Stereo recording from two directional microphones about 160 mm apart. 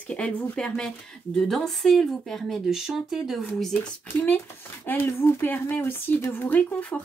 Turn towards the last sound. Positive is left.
turn(degrees=10)  # may be behind; listen again after turning